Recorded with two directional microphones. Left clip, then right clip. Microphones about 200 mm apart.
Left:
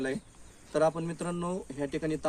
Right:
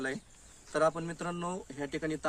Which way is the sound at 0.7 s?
10° left (ahead or behind).